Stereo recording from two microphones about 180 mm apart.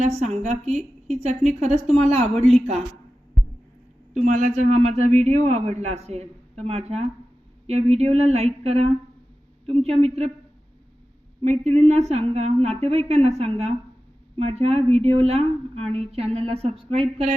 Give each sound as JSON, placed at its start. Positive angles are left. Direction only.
{"t": 0.2, "sound": "a man's voice", "side_deg": -35}
{"t": 4.1, "sound": "a man's voice", "side_deg": -40}
{"t": 11.4, "sound": "a man's voice", "side_deg": -35}